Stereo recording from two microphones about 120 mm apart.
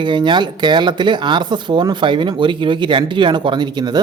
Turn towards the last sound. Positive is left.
turn(degrees=-35)  # may be behind; listen again after turning